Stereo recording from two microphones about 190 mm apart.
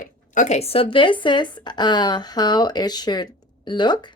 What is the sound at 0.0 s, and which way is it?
Speech, 40° left (ahead or behind).